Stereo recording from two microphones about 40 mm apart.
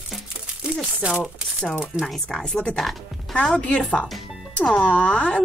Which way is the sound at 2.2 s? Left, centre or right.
Left.